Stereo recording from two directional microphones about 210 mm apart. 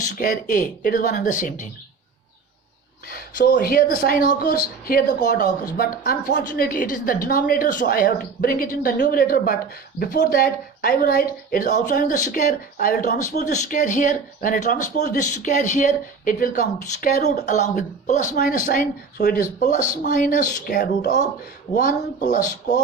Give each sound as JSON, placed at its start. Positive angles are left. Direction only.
{"t": 0.1, "sound": "speech", "side_deg": 40}
{"t": 3.1, "sound": "speech", "side_deg": 45}
{"t": 21.7, "sound": "speech", "side_deg": 20}
{"t": 22.3, "sound": "speech", "side_deg": 35}